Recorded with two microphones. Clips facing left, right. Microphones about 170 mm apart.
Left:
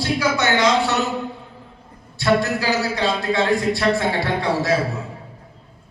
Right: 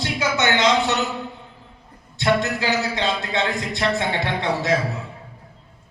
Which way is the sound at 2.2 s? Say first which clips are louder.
Left 2 dB; 20° right (ahead or behind).